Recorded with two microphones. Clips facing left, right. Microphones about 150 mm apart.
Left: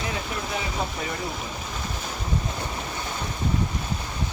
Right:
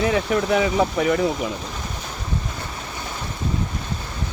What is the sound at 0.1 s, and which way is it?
Speech, 85° right.